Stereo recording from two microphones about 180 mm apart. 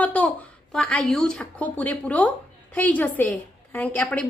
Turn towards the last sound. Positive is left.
turn(degrees=10)  # may be behind; listen again after turning